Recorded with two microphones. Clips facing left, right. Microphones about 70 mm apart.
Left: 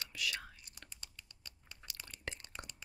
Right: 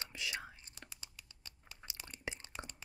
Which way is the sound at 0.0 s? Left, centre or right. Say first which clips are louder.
Left 1 dB; right.